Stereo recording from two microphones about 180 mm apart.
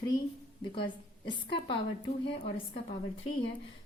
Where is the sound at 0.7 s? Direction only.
25° left (ahead or behind).